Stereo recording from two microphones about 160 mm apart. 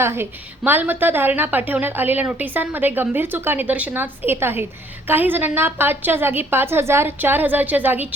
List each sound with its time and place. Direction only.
0.0 s a woman's voice: 15° right (ahead or behind)